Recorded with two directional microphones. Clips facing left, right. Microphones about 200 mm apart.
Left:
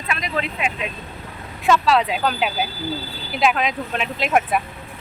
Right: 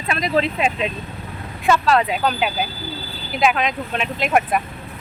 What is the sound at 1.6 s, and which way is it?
Speech, centre (ahead or behind).